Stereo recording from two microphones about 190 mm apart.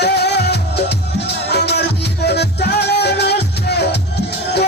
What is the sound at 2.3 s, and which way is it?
Music, 60° left (ahead or behind).